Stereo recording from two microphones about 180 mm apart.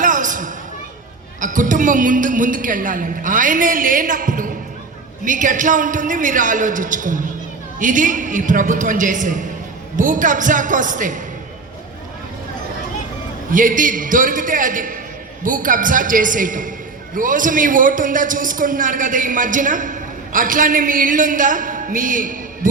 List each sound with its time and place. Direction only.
0.0 s a sound: 45° right (ahead or behind)
1.4 s a man's voice: 45° right (ahead or behind)
13.5 s a man's voice: 50° right (ahead or behind)